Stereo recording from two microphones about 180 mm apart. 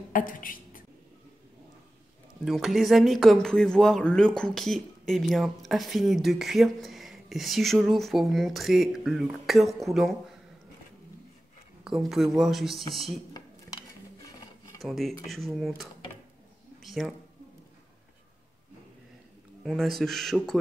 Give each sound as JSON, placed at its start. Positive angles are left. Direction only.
{"t": 0.1, "sound": "speech", "side_deg": 50}
{"t": 2.4, "sound": "speech", "side_deg": 0}
{"t": 11.8, "sound": "speech", "side_deg": 0}
{"t": 14.8, "sound": "speech", "side_deg": 0}
{"t": 16.8, "sound": "a sound", "side_deg": 0}
{"t": 19.6, "sound": "speech", "side_deg": 0}